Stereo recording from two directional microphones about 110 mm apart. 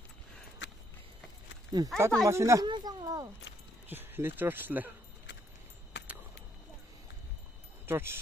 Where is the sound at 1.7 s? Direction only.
35° right (ahead or behind).